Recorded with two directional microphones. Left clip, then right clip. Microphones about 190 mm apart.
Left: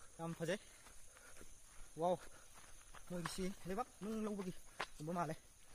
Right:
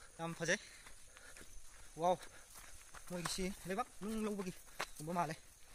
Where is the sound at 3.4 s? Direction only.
5° right (ahead or behind).